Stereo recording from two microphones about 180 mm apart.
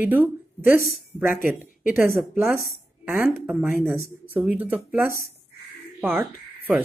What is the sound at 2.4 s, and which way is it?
Speech, 10° right (ahead or behind).